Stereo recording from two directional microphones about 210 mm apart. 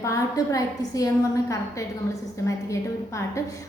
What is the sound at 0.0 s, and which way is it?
A woman's voice, 15° left (ahead or behind).